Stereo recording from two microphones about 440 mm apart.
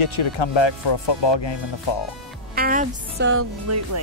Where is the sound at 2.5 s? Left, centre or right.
Centre; by 4.0 s right.